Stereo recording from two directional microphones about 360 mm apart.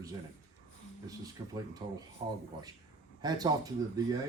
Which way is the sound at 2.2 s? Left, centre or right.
Centre.